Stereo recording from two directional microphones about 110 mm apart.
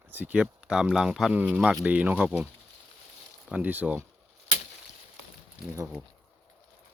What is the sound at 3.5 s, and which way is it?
Speech, 15° right (ahead or behind).